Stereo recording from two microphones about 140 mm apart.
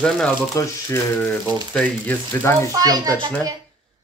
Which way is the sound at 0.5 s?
20° left (ahead or behind).